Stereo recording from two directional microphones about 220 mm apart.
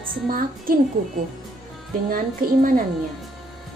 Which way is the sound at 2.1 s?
40° right (ahead or behind).